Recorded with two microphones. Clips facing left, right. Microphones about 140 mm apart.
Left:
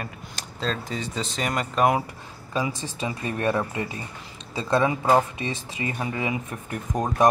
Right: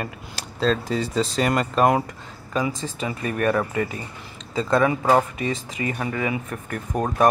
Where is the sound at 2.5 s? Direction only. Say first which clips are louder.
Right 3 dB; 15° left (ahead or behind).